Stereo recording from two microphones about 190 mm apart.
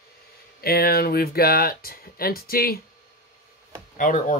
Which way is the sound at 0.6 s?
55° left (ahead or behind).